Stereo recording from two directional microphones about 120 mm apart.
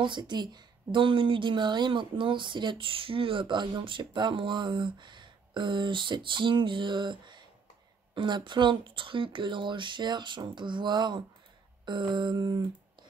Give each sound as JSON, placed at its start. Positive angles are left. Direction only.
{"t": 0.0, "sound": "a woman's voice", "side_deg": -40}